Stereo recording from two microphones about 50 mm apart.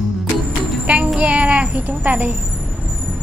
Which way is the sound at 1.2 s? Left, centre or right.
Right.